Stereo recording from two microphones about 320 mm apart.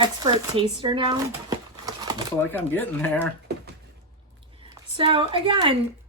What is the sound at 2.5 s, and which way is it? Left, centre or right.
Speech, centre.